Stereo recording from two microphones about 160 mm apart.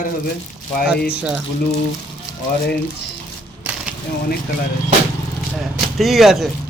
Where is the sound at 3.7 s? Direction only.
10° right (ahead or behind).